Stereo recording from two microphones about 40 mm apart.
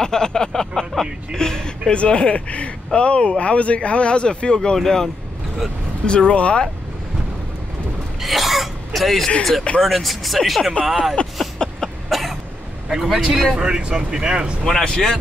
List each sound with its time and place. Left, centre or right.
0.0 s speech: centre
2.0 s speech: left; by 5.1 s centre
6.0 s speech: left
8.2 s throat clearing: centre
9.8 s speech: centre
11.2 s a sound: left
11.5 s a sound: centre
12.1 s cough: centre
12.9 s speech: centre
13.6 s speech: right
14.6 s speech: centre